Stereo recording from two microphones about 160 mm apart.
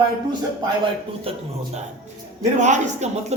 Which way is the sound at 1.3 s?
35° right (ahead or behind).